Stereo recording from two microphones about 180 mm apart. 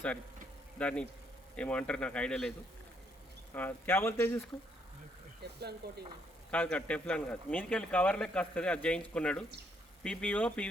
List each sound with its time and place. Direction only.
0.8 s a man's voice: 5° left (ahead or behind)
3.5 s a man's voice: 10° left (ahead or behind)
5.4 s speech: 65° right (ahead or behind)
6.5 s a man's voice: 5° left (ahead or behind)